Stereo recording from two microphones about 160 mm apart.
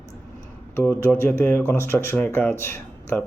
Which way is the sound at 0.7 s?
15° left (ahead or behind).